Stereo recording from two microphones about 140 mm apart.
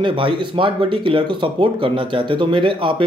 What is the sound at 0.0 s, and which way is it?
Speech, 35° right (ahead or behind).